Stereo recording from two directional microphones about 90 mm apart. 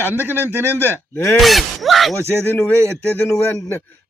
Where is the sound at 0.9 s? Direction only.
25° left (ahead or behind).